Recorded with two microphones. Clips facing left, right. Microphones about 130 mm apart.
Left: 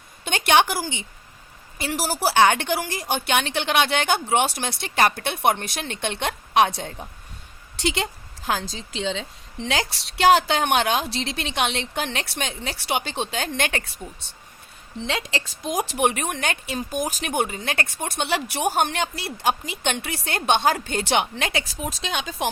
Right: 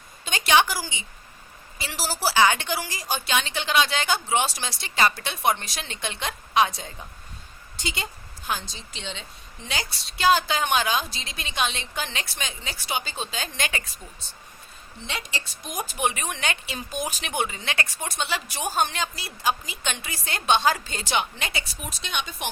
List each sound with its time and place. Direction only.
0.3 s a woman's voice: 60° left (ahead or behind)
7.8 s a woman's voice: 80° left; by 13.9 s 60° left (ahead or behind)
15.0 s a woman's voice: 90° left